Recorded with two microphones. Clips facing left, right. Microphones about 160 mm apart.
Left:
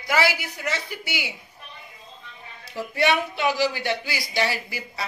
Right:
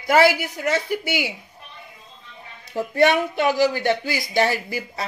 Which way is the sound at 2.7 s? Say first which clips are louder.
Right 5 dB; 45° right (ahead or behind).